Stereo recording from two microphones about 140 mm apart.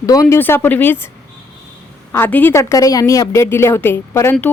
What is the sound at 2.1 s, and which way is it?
A woman's voice, 15° left (ahead or behind).